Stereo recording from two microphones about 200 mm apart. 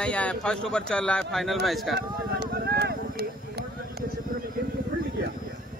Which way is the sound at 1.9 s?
55° right (ahead or behind).